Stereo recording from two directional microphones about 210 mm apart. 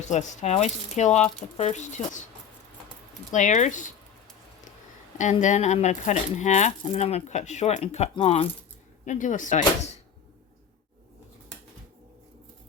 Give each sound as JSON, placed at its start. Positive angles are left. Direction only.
{"t": 0.0, "sound": "speech", "side_deg": 35}
{"t": 3.3, "sound": "speech", "side_deg": 35}
{"t": 5.1, "sound": "speech", "side_deg": 35}